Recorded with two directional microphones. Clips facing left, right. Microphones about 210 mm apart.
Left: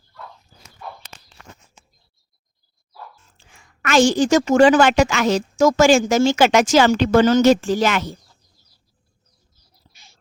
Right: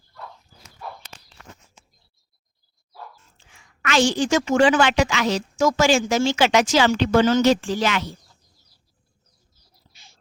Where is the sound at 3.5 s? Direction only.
45° left (ahead or behind).